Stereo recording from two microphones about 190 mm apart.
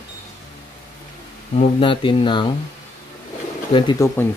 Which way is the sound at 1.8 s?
25° left (ahead or behind).